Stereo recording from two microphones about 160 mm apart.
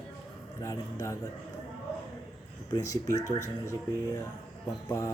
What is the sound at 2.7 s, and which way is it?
Speech, 20° left (ahead or behind).